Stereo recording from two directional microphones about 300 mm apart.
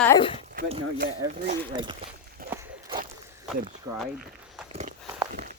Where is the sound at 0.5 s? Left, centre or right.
Right.